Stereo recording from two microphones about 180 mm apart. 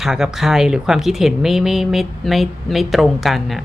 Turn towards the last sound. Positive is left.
turn(degrees=0)  # may be behind; listen again after turning